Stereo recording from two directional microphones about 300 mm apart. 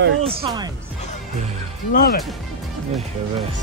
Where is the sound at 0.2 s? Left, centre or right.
Centre.